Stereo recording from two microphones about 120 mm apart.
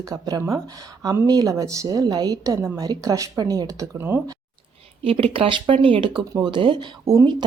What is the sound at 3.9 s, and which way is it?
Speech, 15° right (ahead or behind).